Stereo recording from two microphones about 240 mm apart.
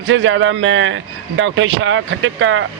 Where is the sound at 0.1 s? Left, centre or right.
Right.